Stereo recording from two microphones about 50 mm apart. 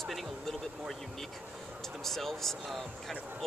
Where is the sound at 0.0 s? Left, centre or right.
Centre.